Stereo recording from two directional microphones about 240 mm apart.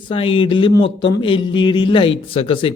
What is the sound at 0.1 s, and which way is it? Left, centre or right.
Speech, left.